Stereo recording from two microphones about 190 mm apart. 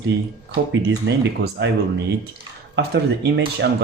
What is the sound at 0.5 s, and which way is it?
Speech, 65° right (ahead or behind).